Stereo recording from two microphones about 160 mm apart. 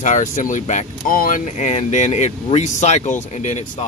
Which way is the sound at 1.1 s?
60° left (ahead or behind).